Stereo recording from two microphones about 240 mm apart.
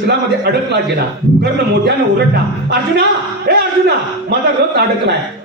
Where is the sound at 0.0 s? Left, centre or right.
Right.